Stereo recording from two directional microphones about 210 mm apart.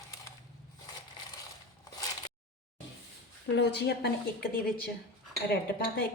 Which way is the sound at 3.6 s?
55° left (ahead or behind).